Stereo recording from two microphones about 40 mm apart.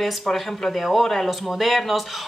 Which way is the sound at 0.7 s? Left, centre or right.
Centre.